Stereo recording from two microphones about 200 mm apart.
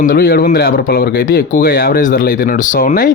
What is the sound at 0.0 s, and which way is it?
Speech, 45° left (ahead or behind).